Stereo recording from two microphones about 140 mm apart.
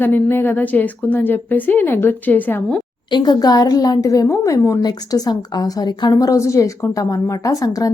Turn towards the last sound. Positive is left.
turn(degrees=25)  # may be behind; listen again after turning